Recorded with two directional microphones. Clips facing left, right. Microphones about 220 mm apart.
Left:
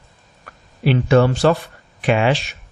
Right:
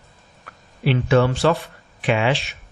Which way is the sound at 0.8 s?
45° left (ahead or behind).